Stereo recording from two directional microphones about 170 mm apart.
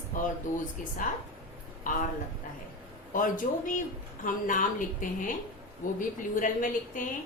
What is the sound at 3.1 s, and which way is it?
A woman's voice, 50° left (ahead or behind).